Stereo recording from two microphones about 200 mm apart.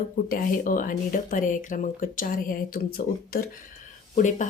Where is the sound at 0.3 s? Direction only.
45° left (ahead or behind).